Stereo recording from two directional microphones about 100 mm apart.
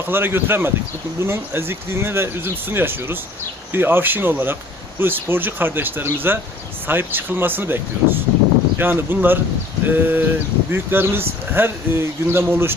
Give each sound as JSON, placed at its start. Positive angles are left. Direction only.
{"t": 0.0, "sound": "speech", "side_deg": -20}